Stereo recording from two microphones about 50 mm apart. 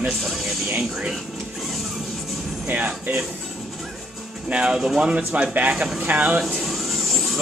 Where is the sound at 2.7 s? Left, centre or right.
Right.